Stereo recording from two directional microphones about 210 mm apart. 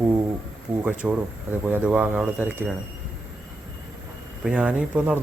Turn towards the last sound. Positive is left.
turn(degrees=-5)  # may be behind; listen again after turning